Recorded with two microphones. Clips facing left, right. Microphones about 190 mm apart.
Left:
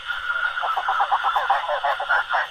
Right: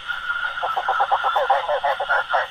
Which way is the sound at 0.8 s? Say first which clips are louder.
Right 3 dB; 30° right (ahead or behind).